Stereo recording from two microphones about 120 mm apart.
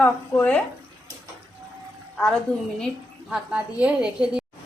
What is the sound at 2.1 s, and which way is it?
Speech, 10° left (ahead or behind).